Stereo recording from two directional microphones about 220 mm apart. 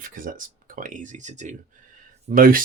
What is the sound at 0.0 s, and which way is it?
Speech, 40° right (ahead or behind).